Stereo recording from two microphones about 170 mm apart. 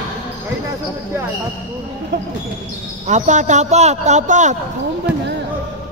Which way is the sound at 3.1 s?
45° right (ahead or behind).